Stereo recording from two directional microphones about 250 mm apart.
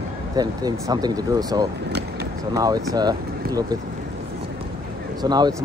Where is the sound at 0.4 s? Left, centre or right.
Centre.